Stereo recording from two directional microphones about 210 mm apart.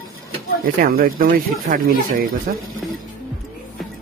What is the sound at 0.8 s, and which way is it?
Speech, 40° right (ahead or behind).